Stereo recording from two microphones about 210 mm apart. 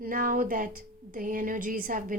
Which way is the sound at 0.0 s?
40° right (ahead or behind).